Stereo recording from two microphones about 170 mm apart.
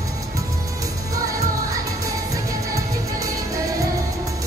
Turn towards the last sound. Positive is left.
turn(degrees=-20)  # may be behind; listen again after turning